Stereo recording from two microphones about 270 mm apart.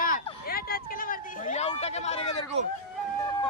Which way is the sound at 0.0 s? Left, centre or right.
Left.